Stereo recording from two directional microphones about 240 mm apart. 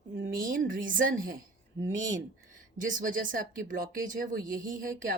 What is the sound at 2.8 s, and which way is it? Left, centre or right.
Speech, right.